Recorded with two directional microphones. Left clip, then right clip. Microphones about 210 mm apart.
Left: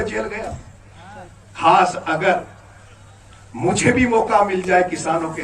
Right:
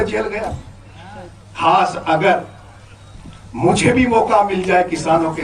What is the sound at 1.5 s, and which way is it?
Speech, 15° right (ahead or behind).